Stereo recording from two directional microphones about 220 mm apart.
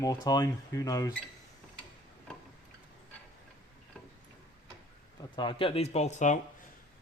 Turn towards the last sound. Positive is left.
turn(degrees=30)  # may be behind; listen again after turning